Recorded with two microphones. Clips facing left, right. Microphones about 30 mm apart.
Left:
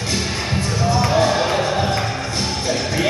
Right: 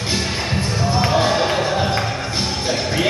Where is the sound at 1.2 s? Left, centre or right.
Centre.